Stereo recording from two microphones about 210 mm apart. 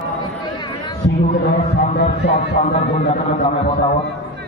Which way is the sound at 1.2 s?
40° left (ahead or behind).